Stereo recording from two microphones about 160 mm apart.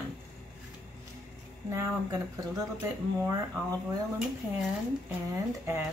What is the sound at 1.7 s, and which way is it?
Speech, 15° right (ahead or behind).